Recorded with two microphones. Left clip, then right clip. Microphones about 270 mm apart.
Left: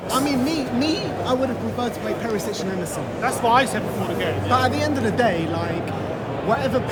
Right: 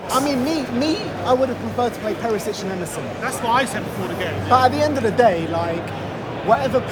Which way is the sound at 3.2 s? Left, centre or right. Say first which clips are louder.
Left 2 dB; centre.